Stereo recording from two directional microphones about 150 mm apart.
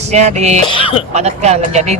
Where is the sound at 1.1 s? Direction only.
50° right (ahead or behind).